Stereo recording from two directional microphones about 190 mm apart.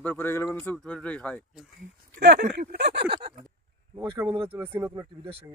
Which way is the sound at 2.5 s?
65° right (ahead or behind).